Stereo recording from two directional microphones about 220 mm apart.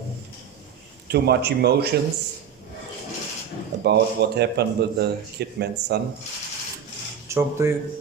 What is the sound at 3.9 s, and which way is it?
A man's voice, 50° right (ahead or behind).